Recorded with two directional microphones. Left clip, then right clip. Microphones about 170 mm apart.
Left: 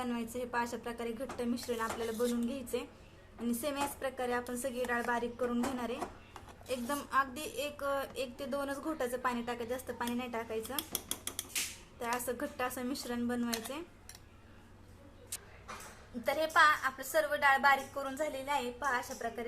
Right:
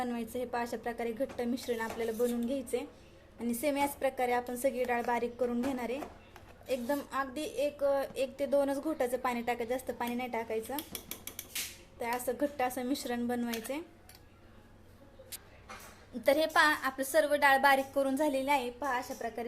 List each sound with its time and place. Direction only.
0.0 s a woman's voice: 20° right (ahead or behind)
6.7 s a woman's voice: 15° right (ahead or behind)
11.9 s speech: 20° right (ahead or behind)
16.2 s a woman's voice: 35° right (ahead or behind)